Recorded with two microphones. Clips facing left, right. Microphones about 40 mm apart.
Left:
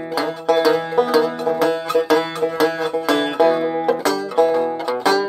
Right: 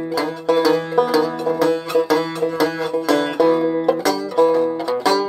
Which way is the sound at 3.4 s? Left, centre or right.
Left.